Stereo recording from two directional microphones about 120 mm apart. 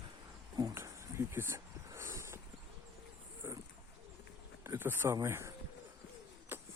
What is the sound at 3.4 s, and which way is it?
Dog, 20° right (ahead or behind).